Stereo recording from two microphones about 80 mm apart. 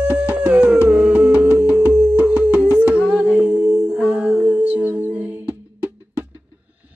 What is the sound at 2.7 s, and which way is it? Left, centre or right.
Humming, centre.